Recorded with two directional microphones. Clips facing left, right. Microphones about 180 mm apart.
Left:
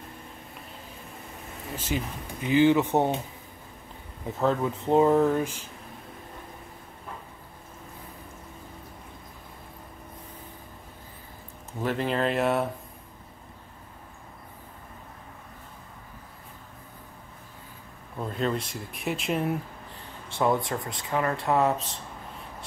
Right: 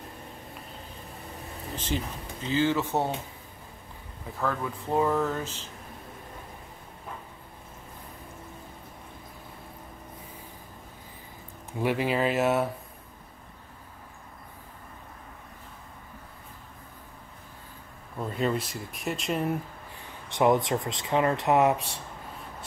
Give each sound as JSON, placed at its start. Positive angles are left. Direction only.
{"t": 1.8, "sound": "speech", "side_deg": 10}
{"t": 4.4, "sound": "speech", "side_deg": 20}
{"t": 11.8, "sound": "speech", "side_deg": -10}
{"t": 18.1, "sound": "speech", "side_deg": -5}
{"t": 20.2, "sound": "speech", "side_deg": -15}